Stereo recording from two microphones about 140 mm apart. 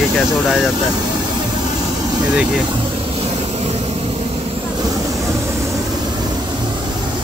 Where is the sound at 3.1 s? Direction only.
50° right (ahead or behind).